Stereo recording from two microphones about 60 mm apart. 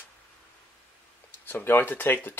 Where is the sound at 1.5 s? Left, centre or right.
Left.